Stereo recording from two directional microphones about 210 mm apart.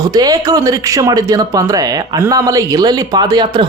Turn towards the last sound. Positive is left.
turn(degrees=-20)  # may be behind; listen again after turning